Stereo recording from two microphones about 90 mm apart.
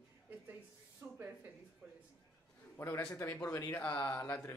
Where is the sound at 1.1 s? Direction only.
20° right (ahead or behind).